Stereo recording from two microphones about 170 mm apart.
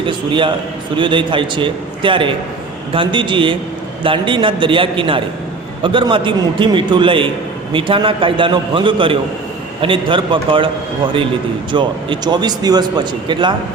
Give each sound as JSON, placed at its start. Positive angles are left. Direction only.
{"t": 0.0, "sound": "a man's voice", "side_deg": -30}
{"t": 11.7, "sound": "a man's voice", "side_deg": -30}